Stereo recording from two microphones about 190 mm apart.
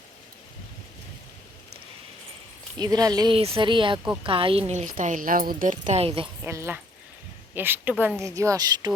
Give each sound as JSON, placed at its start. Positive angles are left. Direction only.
{"t": 2.7, "sound": "speech", "side_deg": -20}
{"t": 6.4, "sound": "a woman's voice", "side_deg": -15}